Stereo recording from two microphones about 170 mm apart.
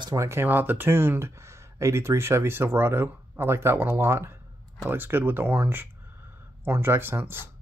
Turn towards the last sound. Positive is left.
turn(degrees=-15)  # may be behind; listen again after turning